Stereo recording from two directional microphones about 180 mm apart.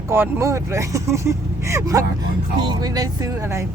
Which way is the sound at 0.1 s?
15° right (ahead or behind).